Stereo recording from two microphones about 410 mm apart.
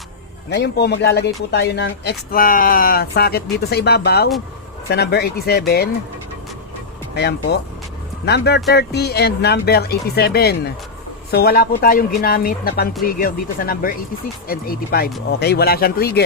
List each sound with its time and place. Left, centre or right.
0.5 s speech: left
7.2 s speech: left